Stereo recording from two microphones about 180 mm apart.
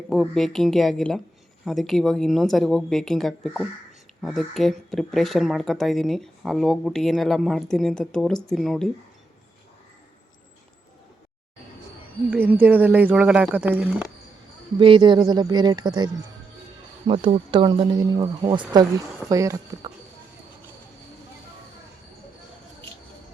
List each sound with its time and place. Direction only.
0.1 s speech: centre (ahead or behind)
12.3 s speech: 10° right (ahead or behind)
14.8 s speech: 30° right (ahead or behind)